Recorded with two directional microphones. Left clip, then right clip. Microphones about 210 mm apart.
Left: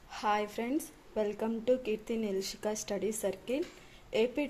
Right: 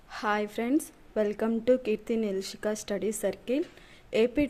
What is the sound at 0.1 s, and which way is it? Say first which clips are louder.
A woman's voice: right 2 dB; 20° right (ahead or behind).